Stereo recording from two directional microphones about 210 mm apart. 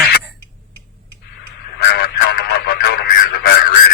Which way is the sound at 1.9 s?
50° left (ahead or behind).